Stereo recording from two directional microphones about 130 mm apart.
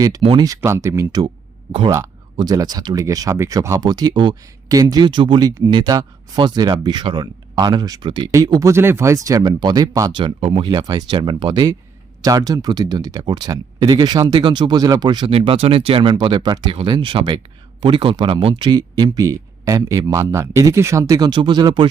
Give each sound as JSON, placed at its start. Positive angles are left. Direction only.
{"t": 0.2, "sound": "speech", "side_deg": -45}
{"t": 0.4, "sound": "speech", "side_deg": -25}
{"t": 2.3, "sound": "speech", "side_deg": -30}
{"t": 15.3, "sound": "speech", "side_deg": -45}